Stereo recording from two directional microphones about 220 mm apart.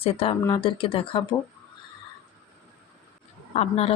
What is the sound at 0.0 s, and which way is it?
Speech, 25° left (ahead or behind).